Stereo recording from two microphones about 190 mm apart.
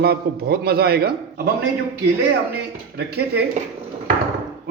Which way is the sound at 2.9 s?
60° right (ahead or behind).